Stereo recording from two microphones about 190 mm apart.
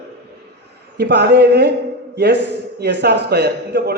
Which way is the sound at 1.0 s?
60° right (ahead or behind).